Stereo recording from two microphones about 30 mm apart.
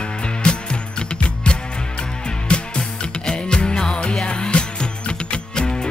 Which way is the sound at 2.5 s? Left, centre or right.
Left.